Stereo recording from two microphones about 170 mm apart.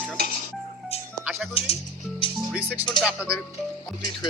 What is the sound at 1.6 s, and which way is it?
Music, 35° left (ahead or behind).